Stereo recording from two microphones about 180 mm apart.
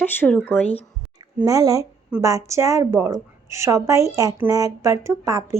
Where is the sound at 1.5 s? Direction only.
20° right (ahead or behind).